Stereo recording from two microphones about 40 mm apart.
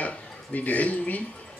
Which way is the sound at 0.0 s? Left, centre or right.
Left.